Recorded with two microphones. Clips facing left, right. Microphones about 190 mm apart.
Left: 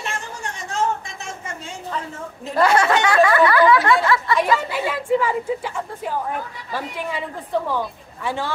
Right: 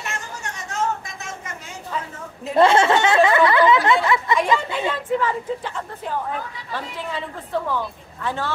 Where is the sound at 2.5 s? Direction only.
25° right (ahead or behind).